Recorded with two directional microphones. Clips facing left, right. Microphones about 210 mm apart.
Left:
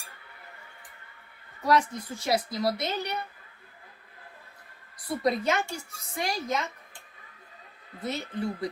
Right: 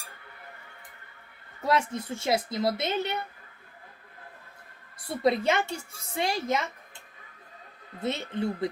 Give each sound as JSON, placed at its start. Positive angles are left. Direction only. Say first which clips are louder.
{"t": 1.6, "sound": "a woman's voice", "louder": "left 1 dB", "side_deg": -25}
{"t": 5.0, "sound": "a woman's voice", "louder": "right 2 dB", "side_deg": -25}
{"t": 8.0, "sound": "a woman's voice", "louder": "right 2 dB", "side_deg": -25}